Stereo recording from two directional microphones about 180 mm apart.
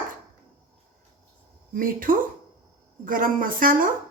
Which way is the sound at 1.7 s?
50° right (ahead or behind).